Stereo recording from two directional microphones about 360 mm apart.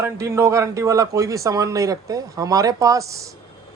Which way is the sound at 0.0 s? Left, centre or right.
Centre.